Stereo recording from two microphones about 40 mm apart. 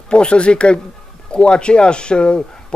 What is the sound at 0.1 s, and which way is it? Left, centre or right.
Speech, left.